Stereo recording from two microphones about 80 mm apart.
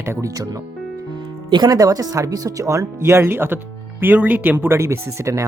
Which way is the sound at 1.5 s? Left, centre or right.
Right.